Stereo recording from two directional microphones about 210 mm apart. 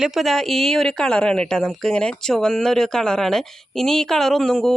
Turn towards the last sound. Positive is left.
turn(degrees=0)  # may be behind; listen again after turning